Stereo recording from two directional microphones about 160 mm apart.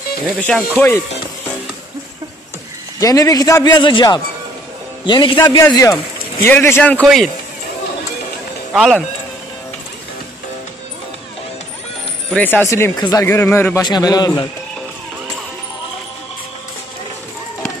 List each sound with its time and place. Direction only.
0.4 s speech: 5° left (ahead or behind)
0.7 s a man's voice: 15° left (ahead or behind)
3.0 s a man's voice: 20° left (ahead or behind)
8.7 s speech: centre (ahead or behind)
12.4 s a man's voice: 10° left (ahead or behind)
13.8 s speech: 25° left (ahead or behind)